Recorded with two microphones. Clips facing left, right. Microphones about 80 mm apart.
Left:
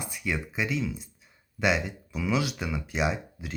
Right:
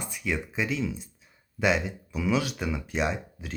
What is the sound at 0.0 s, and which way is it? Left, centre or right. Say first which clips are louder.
Speech: right 1 dB; centre.